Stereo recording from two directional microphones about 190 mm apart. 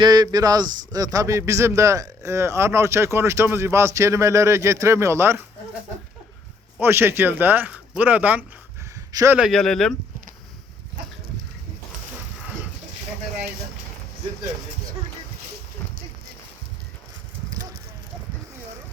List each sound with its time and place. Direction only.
0.0 s speech: 20° right (ahead or behind)
6.7 s speech: 10° right (ahead or behind)
9.5 s speech: centre (ahead or behind)